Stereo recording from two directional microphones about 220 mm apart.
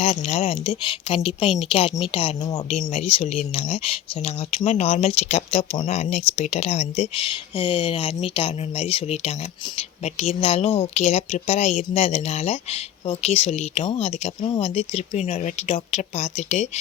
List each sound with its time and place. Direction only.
0.0 s speech: 30° left (ahead or behind)